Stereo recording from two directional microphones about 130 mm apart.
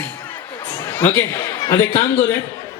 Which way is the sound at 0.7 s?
20° left (ahead or behind).